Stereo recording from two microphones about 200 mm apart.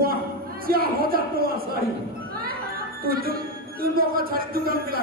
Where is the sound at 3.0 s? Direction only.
50° right (ahead or behind).